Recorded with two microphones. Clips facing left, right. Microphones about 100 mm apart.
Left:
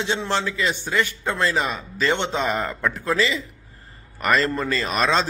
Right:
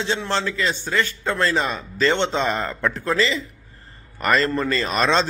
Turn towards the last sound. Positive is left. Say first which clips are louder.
# right 1 dB
turn(degrees=5)  # may be behind; listen again after turning